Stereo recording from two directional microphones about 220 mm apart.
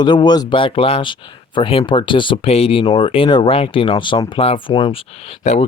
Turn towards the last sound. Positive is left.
turn(degrees=30)  # may be behind; listen again after turning